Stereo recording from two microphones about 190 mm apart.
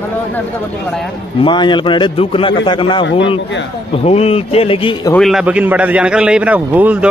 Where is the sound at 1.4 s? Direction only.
25° left (ahead or behind).